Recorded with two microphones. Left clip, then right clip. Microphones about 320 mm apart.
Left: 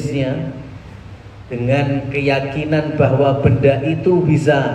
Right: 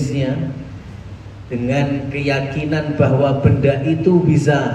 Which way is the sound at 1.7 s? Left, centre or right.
Centre.